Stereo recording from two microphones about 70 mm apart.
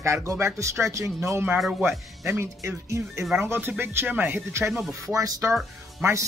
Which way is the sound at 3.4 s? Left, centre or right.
Right.